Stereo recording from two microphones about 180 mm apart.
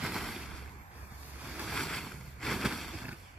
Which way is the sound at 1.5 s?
Centre (ahead or behind).